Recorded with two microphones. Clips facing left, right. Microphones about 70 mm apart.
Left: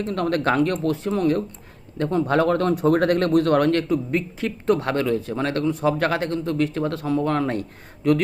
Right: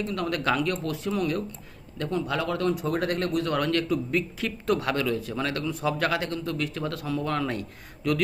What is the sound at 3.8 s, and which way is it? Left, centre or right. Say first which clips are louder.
A man's voice: left 4 dB; left.